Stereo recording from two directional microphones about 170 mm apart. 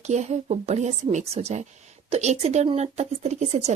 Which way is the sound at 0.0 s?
40° right (ahead or behind).